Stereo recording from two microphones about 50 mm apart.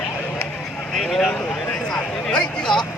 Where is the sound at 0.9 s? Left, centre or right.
Centre.